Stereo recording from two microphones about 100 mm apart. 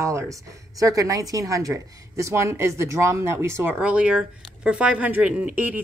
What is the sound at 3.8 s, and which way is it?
Speech, 10° right (ahead or behind).